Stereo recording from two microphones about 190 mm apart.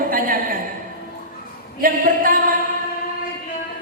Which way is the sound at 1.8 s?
45° right (ahead or behind).